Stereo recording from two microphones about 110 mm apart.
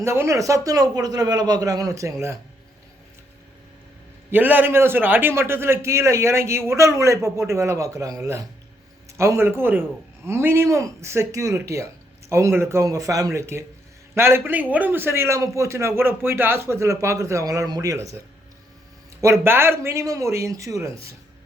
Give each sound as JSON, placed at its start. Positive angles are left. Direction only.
{"t": 0.0, "sound": "a man's voice", "side_deg": -25}
{"t": 4.3, "sound": "a man's voice", "side_deg": -15}
{"t": 19.2, "sound": "a man's voice", "side_deg": -20}